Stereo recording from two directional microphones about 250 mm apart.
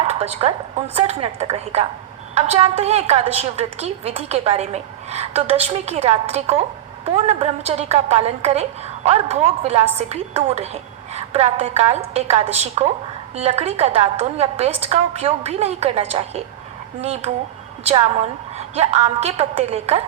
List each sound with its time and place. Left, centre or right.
0.1 s a woman's voice: right
18.5 s a woman's voice: right